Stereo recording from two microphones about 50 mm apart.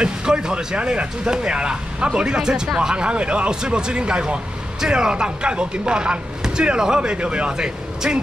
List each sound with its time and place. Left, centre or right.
0.0 s speech: centre